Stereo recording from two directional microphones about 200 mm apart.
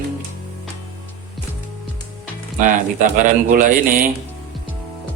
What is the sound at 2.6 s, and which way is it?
Mantra, 40° right (ahead or behind).